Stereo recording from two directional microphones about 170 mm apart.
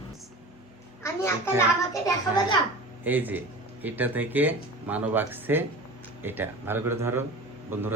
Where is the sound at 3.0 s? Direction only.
10° right (ahead or behind).